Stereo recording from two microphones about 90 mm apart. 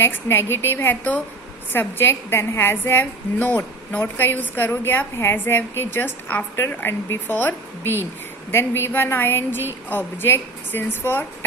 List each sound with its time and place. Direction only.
0.0 s a woman's voice: 25° left (ahead or behind)